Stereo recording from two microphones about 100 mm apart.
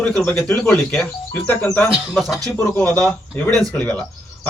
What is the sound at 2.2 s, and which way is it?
Speech, centre (ahead or behind).